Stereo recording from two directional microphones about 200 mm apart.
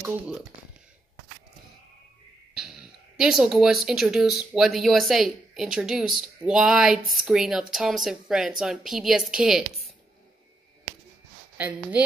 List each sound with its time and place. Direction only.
2.5 s speech: 5° right (ahead or behind)
11.5 s speech: 5° right (ahead or behind)